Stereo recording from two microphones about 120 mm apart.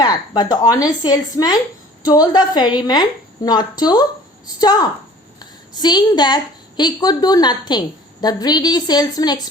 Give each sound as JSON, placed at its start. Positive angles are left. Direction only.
{"t": 0.0, "sound": "a woman's voice", "side_deg": 35}